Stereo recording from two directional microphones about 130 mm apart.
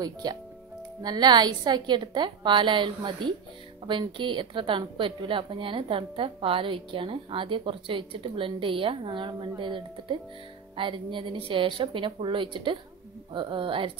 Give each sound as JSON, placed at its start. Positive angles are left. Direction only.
{"t": 0.0, "sound": "a woman's voice", "side_deg": -30}